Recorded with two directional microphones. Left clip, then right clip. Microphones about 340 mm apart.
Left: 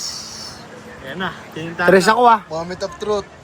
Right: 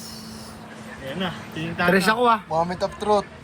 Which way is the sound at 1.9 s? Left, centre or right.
Left.